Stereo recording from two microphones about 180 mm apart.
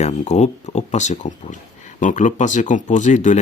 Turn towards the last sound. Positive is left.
turn(degrees=40)  # may be behind; listen again after turning